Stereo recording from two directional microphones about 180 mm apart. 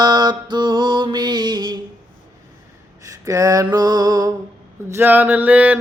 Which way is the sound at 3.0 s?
20° right (ahead or behind).